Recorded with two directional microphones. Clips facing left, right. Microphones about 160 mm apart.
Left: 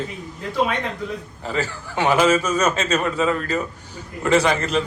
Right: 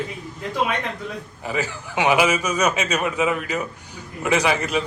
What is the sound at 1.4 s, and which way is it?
A man's voice, 15° right (ahead or behind).